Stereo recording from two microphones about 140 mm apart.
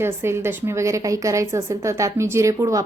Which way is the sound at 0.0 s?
20° right (ahead or behind).